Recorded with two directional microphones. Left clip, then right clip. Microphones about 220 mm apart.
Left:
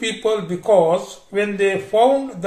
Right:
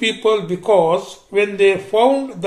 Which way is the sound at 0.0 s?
20° right (ahead or behind).